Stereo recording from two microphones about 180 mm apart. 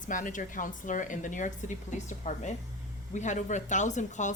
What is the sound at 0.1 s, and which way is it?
Speech, 45° left (ahead or behind).